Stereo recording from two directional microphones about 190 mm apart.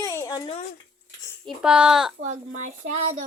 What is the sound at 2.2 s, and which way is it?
Speech, 40° right (ahead or behind).